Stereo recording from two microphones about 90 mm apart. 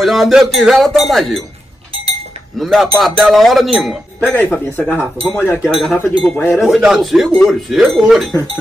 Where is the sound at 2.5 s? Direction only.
Centre (ahead or behind).